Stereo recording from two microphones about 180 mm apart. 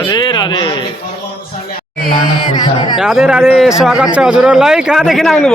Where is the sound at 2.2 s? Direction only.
25° left (ahead or behind).